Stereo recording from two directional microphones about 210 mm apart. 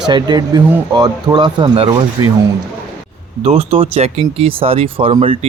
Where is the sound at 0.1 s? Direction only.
20° right (ahead or behind).